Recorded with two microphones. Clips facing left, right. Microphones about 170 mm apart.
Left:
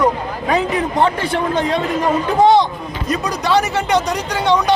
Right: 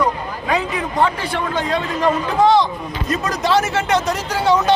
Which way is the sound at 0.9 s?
20° left (ahead or behind).